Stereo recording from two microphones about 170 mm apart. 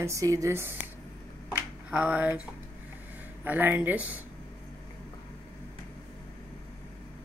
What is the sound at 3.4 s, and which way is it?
Speech, 10° right (ahead or behind).